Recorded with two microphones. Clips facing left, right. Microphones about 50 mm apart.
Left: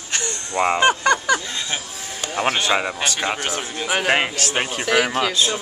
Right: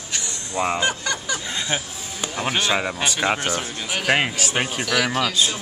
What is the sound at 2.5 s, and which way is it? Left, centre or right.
Speech, centre.